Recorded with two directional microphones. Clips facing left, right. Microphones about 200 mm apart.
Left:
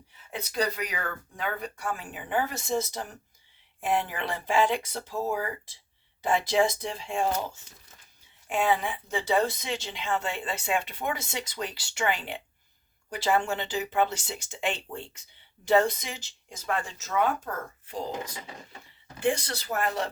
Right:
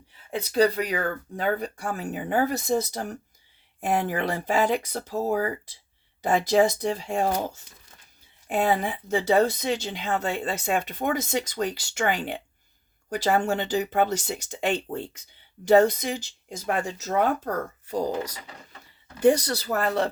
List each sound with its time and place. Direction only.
0.3 s speech: 30° right (ahead or behind)